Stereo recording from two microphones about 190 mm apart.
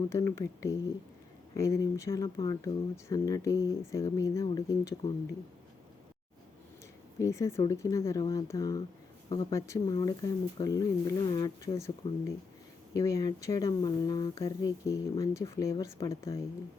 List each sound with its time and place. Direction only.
0.1 s speech: 15° left (ahead or behind)
7.2 s speech: 15° left (ahead or behind)
12.9 s speech: 15° left (ahead or behind)